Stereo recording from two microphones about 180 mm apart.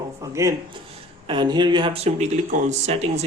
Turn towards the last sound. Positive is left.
turn(degrees=-35)  # may be behind; listen again after turning